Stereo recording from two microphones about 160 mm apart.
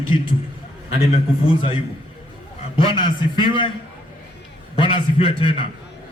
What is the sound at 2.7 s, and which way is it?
Speech, 30° left (ahead or behind).